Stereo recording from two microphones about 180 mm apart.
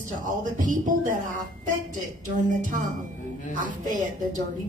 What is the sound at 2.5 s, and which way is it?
A woman's voice, 45° right (ahead or behind).